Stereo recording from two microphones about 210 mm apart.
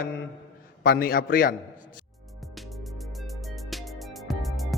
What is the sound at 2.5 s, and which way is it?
Music, centre (ahead or behind).